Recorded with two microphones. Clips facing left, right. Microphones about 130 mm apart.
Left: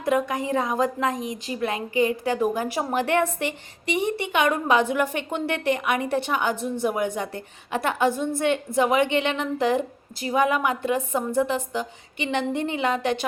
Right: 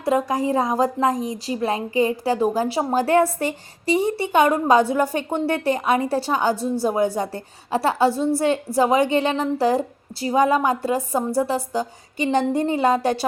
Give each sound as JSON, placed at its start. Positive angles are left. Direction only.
{"t": 0.0, "sound": "a woman's voice", "side_deg": -30}